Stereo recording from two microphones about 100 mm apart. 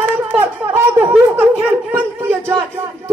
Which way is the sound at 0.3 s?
25° right (ahead or behind).